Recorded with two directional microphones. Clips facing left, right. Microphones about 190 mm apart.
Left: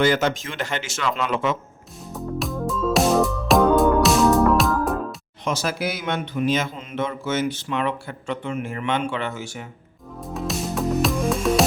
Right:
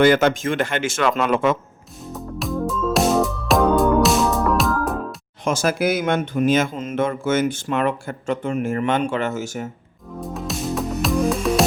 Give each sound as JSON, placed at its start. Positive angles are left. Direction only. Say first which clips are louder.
{"t": 0.0, "sound": "speech", "louder": "right 5 dB", "side_deg": -55}
{"t": 2.1, "sound": "music", "louder": "right 1 dB", "side_deg": 0}
{"t": 5.5, "sound": "speech", "louder": "right 5 dB", "side_deg": -50}
{"t": 10.2, "sound": "music", "louder": "even", "side_deg": 0}